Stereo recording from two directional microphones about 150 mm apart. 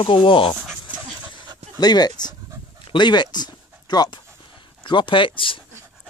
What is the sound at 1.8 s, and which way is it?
Speech, 25° left (ahead or behind).